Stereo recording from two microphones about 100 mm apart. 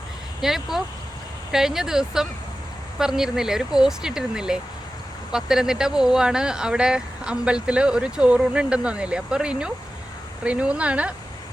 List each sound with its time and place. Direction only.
0.4 s speech: 5° right (ahead or behind)